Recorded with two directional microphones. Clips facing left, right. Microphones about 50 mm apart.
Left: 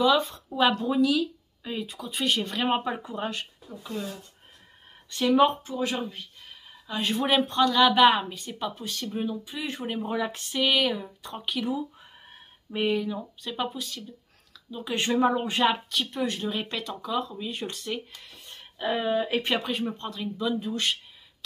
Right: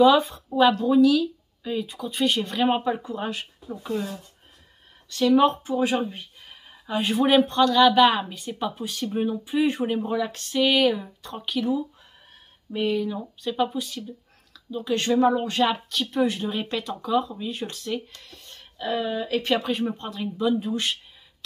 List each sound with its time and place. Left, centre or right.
0.0 s speech: centre
0.6 s speech: centre
3.2 s speech: centre
5.3 s speech: centre
5.6 s speech: centre
9.1 s speech: centre
10.0 s speech: centre
13.0 s speech: centre
14.5 s a sound: centre
15.0 s speech: centre
19.6 s speech: centre